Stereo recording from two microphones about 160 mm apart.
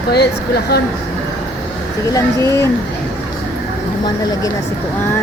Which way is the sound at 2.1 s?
20° left (ahead or behind).